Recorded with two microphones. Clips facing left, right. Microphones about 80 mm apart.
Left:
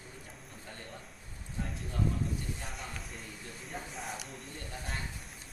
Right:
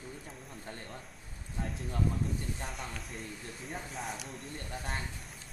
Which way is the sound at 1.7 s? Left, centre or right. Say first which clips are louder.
Even; centre.